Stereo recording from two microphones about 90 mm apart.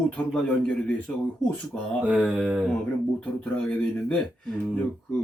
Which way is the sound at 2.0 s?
15° right (ahead or behind).